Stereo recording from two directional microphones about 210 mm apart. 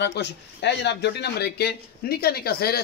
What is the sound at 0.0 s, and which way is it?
Speech, 55° left (ahead or behind).